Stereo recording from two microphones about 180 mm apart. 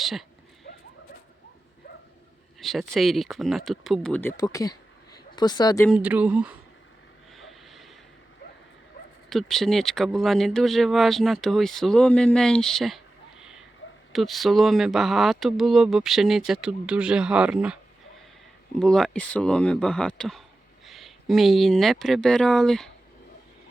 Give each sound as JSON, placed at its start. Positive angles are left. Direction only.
{"t": 0.0, "sound": "speech", "side_deg": 0}
{"t": 2.6, "sound": "speech", "side_deg": 0}
{"t": 5.9, "sound": "speech", "side_deg": -10}
{"t": 7.3, "sound": "a sound", "side_deg": 0}
{"t": 9.3, "sound": "speech", "side_deg": 0}
{"t": 14.1, "sound": "speech", "side_deg": 0}
{"t": 18.8, "sound": "speech", "side_deg": 5}